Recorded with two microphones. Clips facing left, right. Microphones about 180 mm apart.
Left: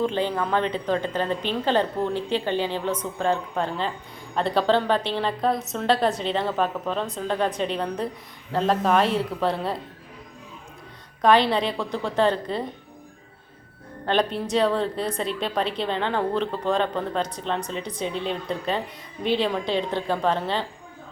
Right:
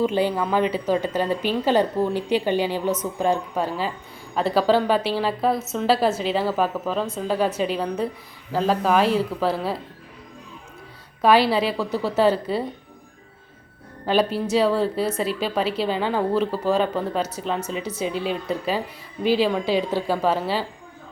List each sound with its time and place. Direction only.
0.0 s a woman's voice: 10° right (ahead or behind)
11.2 s a woman's voice: 5° right (ahead or behind)
14.0 s a woman's voice: 5° right (ahead or behind)